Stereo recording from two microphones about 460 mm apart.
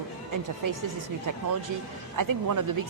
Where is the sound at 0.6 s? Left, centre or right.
Right.